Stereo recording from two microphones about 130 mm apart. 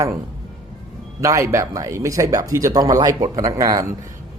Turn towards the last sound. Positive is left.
turn(degrees=-30)  # may be behind; listen again after turning